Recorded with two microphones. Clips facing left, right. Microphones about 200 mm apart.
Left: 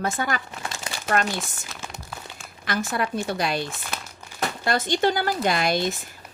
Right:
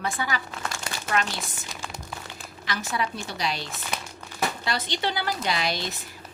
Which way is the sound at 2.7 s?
55° left (ahead or behind).